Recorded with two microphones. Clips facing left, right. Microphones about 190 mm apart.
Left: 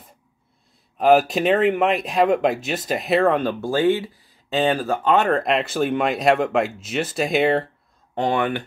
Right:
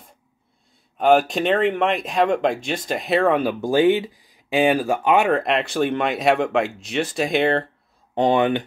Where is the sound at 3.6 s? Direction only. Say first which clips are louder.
Right 4 dB; 15° right (ahead or behind); by 7.6 s centre (ahead or behind).